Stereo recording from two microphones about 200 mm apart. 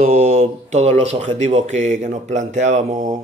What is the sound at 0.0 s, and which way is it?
Speech, 40° right (ahead or behind).